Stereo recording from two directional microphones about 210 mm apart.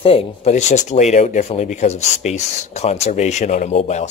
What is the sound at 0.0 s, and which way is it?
Speech, 25° left (ahead or behind).